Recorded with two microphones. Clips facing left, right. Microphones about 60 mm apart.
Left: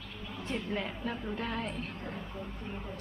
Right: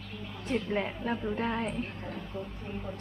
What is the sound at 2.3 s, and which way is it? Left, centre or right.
Speech, centre.